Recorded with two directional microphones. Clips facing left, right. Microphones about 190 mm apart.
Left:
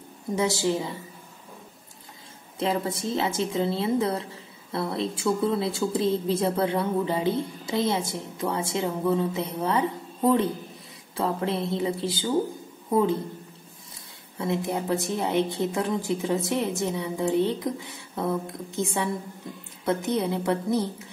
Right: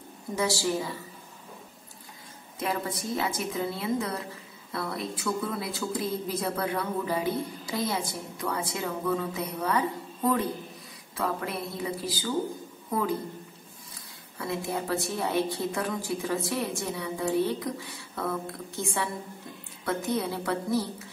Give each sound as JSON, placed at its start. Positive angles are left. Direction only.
{"t": 0.4, "sound": "a woman's voice", "side_deg": 20}
{"t": 2.6, "sound": "a woman's voice", "side_deg": 25}
{"t": 14.4, "sound": "a woman's voice", "side_deg": 20}